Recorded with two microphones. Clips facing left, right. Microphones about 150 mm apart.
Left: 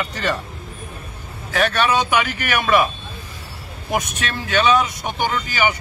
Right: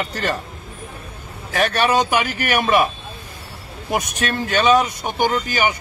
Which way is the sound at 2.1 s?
40° right (ahead or behind).